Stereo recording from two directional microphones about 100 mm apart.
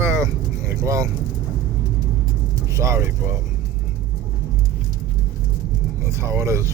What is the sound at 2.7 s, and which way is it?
Speech, 30° right (ahead or behind).